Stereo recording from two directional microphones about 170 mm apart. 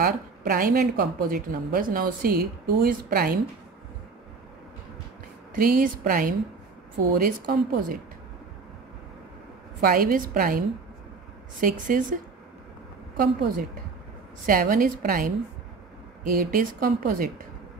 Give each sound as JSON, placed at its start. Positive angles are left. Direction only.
{"t": 0.0, "sound": "speech", "side_deg": -55}
{"t": 5.5, "sound": "speech", "side_deg": -55}
{"t": 9.8, "sound": "speech", "side_deg": -60}
{"t": 11.6, "sound": "speech", "side_deg": -50}
{"t": 13.2, "sound": "speech", "side_deg": -55}